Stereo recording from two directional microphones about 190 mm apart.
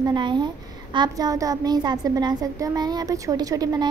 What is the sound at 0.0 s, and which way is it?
A woman's voice, 25° right (ahead or behind).